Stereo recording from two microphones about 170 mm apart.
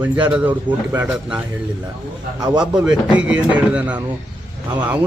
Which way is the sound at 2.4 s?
25° right (ahead or behind).